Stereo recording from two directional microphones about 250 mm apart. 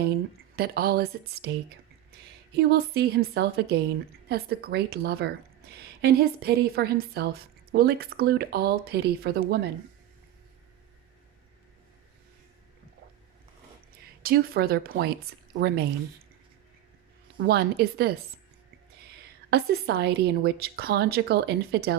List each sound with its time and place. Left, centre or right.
0.5 s a woman's voice: right
2.6 s a woman's voice: right
14.2 s a woman's voice: right
17.3 s a woman's voice: right
19.5 s a woman's voice: right